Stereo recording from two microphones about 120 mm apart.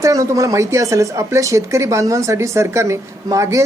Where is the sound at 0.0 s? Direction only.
25° right (ahead or behind).